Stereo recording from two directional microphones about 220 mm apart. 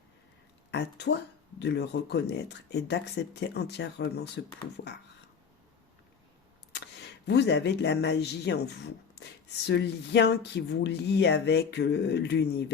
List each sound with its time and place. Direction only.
0.7 s speech: 50° left (ahead or behind)
6.7 s speech: 50° left (ahead or behind)